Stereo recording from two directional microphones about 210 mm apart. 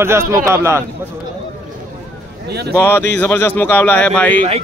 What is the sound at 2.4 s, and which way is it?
Speech, 50° right (ahead or behind).